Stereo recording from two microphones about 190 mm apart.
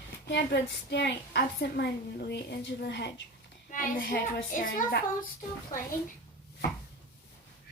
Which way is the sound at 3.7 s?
45° left (ahead or behind).